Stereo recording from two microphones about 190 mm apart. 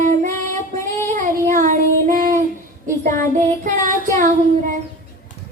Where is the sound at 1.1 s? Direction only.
45° right (ahead or behind).